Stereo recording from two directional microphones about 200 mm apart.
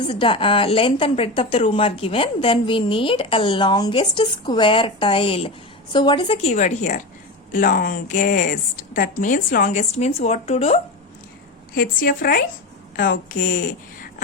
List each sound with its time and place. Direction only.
0.1 s a woman's voice: 25° left (ahead or behind)
11.7 s a woman's voice: 50° left (ahead or behind)